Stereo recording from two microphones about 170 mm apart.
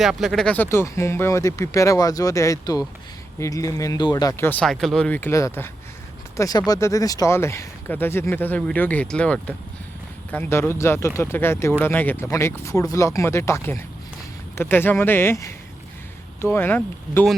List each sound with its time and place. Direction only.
0.0 s speech: centre (ahead or behind)